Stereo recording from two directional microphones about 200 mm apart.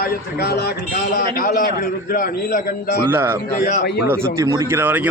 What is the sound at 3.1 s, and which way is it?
Speech, 10° right (ahead or behind).